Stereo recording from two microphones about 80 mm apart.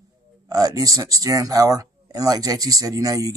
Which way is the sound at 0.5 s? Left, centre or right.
Right.